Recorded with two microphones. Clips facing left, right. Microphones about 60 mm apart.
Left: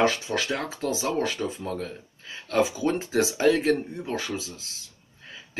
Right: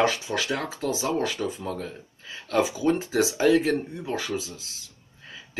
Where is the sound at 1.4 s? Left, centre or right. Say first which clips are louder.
Right 1 dB; right.